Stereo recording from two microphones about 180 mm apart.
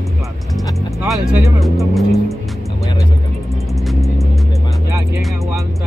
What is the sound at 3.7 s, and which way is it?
Music, centre (ahead or behind).